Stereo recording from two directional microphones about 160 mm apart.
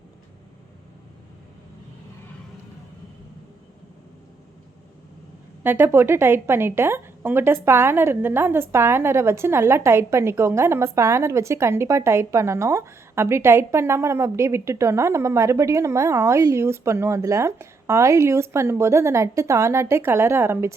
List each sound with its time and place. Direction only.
5.6 s a woman's voice: 15° right (ahead or behind)